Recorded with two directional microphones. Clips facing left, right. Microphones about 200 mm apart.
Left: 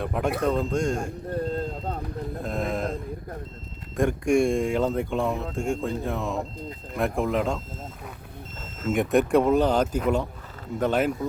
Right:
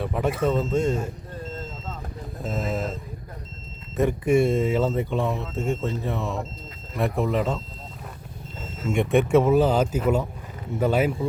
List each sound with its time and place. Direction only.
0.0 s speech: centre (ahead or behind)
1.3 s a sound: 60° left (ahead or behind)
2.4 s speech: centre (ahead or behind)
8.9 s speech: centre (ahead or behind)